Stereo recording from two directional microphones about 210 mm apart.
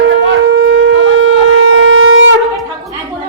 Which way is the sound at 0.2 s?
55° right (ahead or behind).